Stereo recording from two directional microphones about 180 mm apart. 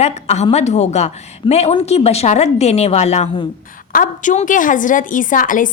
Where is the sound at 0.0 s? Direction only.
40° left (ahead or behind).